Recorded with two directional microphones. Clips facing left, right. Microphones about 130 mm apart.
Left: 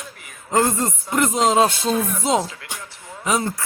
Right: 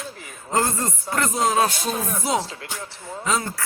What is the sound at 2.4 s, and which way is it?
Speech, 30° right (ahead or behind).